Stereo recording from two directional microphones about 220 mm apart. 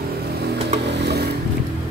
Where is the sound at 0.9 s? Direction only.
50° right (ahead or behind).